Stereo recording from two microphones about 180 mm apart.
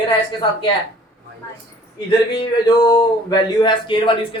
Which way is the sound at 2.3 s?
20° left (ahead or behind).